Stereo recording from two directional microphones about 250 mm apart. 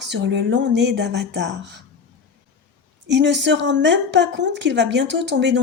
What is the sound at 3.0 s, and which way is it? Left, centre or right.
Speech, right.